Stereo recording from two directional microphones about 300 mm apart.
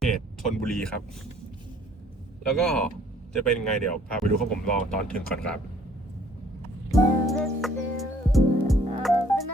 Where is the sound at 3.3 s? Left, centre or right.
Centre.